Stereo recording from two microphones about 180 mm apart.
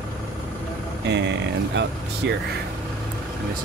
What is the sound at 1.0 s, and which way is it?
Speech, 75° right (ahead or behind).